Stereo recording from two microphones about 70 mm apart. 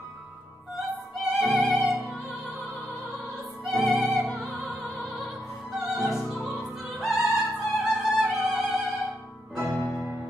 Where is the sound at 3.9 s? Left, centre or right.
Centre.